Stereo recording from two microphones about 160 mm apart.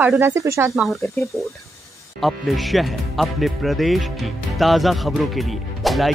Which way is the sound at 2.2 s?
Centre (ahead or behind).